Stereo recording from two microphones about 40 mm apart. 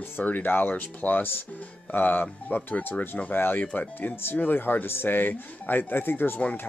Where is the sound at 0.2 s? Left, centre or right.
Left.